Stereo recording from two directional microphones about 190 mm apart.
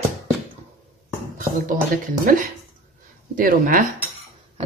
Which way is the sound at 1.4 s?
45° right (ahead or behind).